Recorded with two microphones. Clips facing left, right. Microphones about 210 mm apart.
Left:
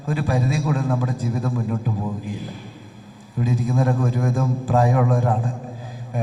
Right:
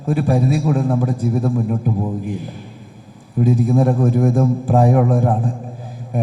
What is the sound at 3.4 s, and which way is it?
A man's voice, 55° right (ahead or behind).